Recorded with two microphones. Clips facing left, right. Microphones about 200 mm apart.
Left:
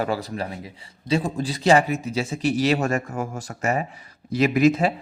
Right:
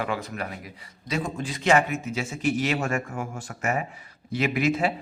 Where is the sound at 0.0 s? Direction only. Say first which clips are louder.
Left 4 dB; 35° left (ahead or behind).